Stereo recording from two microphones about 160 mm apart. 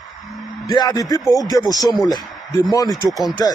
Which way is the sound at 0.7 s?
25° left (ahead or behind).